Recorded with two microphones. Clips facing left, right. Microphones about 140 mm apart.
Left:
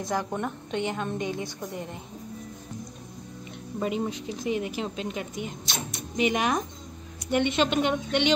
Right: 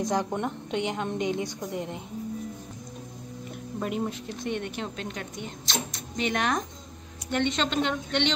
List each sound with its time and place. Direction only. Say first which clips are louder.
0.0 s a woman's voice: right 2 dB; 20° right (ahead or behind)
3.8 s a woman's voice: left 2 dB; centre (ahead or behind)